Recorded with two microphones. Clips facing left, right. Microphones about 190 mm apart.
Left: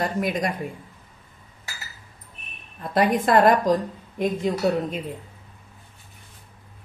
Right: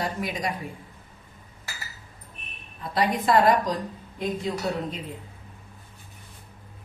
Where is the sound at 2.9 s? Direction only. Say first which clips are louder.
Left 3 dB; 50° left (ahead or behind).